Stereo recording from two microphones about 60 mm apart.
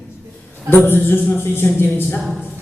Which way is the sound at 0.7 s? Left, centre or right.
Left.